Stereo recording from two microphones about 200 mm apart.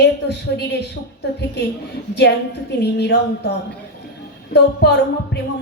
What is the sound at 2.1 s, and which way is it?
A woman's voice, 55° left (ahead or behind).